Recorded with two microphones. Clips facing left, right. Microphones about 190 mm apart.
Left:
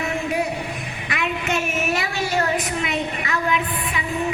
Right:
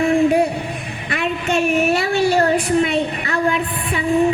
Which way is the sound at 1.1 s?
30° right (ahead or behind).